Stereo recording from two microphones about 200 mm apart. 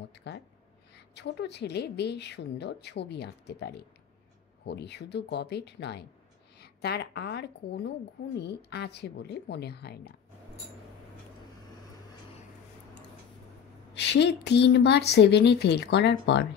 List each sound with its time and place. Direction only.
0.1 s a sound: 60° left (ahead or behind)
0.9 s a woman's voice: 55° left (ahead or behind)
13.9 s a woman's voice: 60° left (ahead or behind)